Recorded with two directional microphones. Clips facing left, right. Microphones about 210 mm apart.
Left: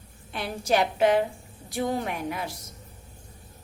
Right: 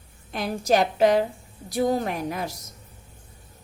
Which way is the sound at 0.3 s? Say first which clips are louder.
Right 3 dB; 40° right (ahead or behind).